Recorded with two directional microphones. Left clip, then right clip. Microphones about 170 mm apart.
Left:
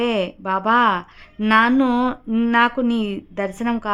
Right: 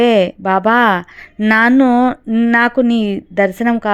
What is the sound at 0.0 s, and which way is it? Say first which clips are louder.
Speech: right 10 dB; 35° right (ahead or behind).